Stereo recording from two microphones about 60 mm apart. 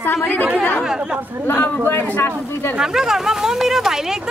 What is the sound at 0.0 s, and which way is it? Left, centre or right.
Speech, left.